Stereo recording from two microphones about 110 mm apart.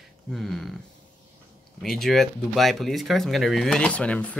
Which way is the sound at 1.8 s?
5° left (ahead or behind).